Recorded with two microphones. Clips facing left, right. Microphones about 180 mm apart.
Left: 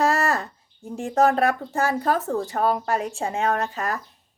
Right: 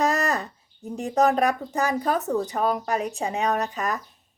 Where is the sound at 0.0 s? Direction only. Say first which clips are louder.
Left 2 dB; 15° right (ahead or behind).